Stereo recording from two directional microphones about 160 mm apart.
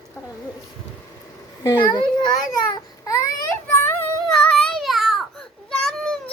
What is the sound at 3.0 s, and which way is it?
Speech, 20° left (ahead or behind).